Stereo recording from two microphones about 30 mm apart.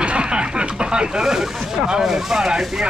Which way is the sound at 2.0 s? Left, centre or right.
Centre.